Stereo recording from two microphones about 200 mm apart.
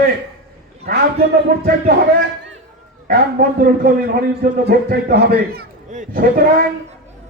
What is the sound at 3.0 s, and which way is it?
A man's voice, 50° right (ahead or behind).